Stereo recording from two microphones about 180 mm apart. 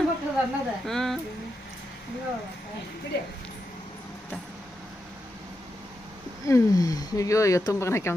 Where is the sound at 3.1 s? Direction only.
70° left (ahead or behind).